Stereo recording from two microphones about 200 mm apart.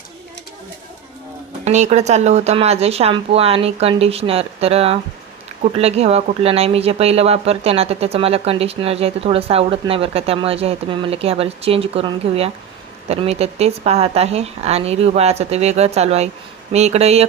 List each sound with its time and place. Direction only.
1.6 s speech: 35° right (ahead or behind)